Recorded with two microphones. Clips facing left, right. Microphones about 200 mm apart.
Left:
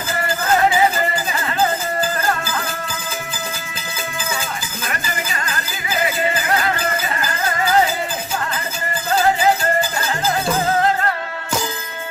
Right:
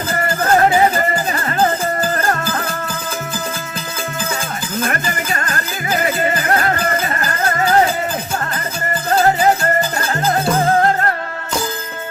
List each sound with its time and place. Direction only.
0.1 s music: 45° right (ahead or behind)
4.8 s music: 45° right (ahead or behind)